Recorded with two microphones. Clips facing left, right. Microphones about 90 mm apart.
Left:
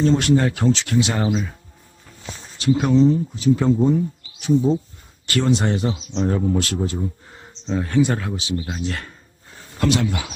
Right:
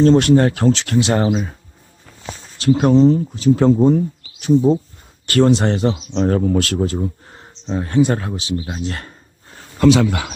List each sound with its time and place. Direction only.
0.0 s speech: 50° right (ahead or behind)
2.2 s a sound: 65° right (ahead or behind)
2.7 s speech: 45° right (ahead or behind); by 3.6 s 65° right (ahead or behind)
3.6 s speech: 50° right (ahead or behind); by 7.0 s 70° right (ahead or behind)
7.7 s speech: 30° right (ahead or behind)
10.1 s speech: 90° right